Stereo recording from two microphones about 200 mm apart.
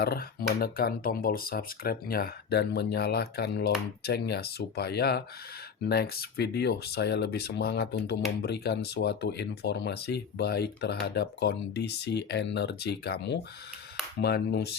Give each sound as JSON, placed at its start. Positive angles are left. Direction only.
{"t": 0.0, "sound": "speech", "side_deg": 50}